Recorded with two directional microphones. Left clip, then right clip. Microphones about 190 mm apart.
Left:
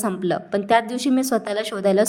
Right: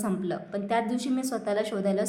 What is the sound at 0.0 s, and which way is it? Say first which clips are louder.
A woman's voice: left 8 dB; 40° left (ahead or behind).